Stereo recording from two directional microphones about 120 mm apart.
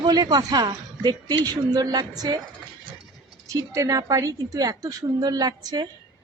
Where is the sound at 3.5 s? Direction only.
30° right (ahead or behind).